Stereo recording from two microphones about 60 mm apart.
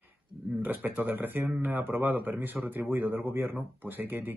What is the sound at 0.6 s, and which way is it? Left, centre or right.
Speech, right.